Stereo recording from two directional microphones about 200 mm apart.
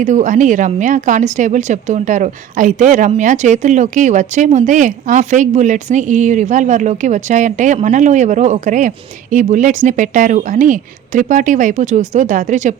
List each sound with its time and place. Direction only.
0.0 s speech: 40° right (ahead or behind)